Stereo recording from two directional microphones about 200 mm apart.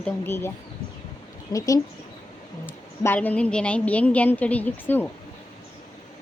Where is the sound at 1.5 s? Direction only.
15° left (ahead or behind).